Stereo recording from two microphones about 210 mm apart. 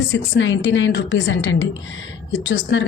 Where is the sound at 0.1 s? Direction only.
60° left (ahead or behind).